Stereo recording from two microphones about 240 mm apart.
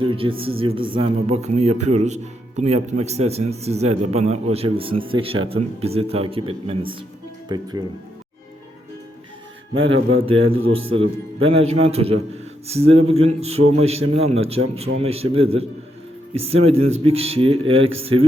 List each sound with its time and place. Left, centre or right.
0.0 s speech: right
9.7 s a man's voice: right
10.8 s speech: right